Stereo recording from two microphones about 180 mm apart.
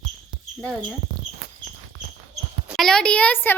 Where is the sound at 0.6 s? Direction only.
5° right (ahead or behind).